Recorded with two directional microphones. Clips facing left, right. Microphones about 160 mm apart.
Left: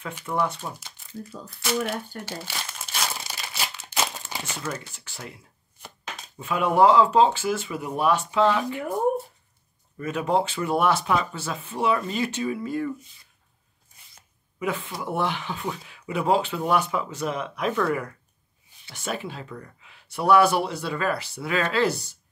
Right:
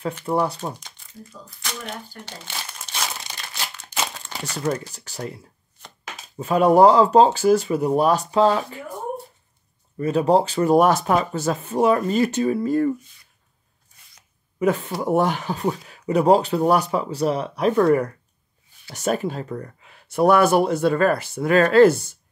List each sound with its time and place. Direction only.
0.2 s speech: 35° right (ahead or behind)
0.7 s speech: 5° left (ahead or behind)
2.4 s crumpling: 5° left (ahead or behind)
4.6 s speech: 35° right (ahead or behind)
5.8 s chopping: centre (ahead or behind)
6.3 s speech: 40° right (ahead or behind)
9.9 s speech: 35° right (ahead or behind)
14.6 s speech: 40° right (ahead or behind)